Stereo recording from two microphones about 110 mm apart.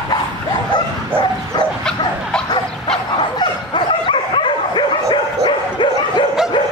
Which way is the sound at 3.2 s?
50° left (ahead or behind).